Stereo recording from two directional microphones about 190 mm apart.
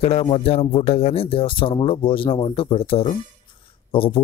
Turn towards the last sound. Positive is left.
turn(degrees=30)  # may be behind; listen again after turning